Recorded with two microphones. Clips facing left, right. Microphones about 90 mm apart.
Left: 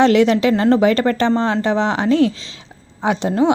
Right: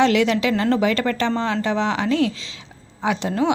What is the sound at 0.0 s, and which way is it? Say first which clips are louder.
A woman's voice: left 5 dB; 35° left (ahead or behind).